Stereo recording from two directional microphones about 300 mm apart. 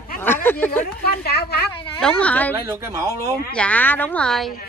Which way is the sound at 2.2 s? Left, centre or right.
Centre.